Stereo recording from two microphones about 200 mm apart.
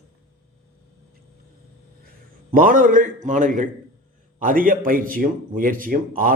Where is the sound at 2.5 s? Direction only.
45° right (ahead or behind).